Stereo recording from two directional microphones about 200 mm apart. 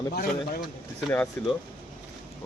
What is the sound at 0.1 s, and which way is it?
Speech, 45° left (ahead or behind).